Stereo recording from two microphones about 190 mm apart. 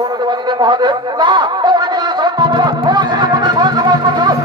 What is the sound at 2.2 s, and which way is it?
Music, 25° right (ahead or behind).